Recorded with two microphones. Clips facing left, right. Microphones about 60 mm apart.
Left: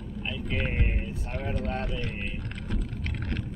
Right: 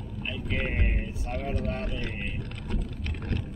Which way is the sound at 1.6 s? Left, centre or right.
Left.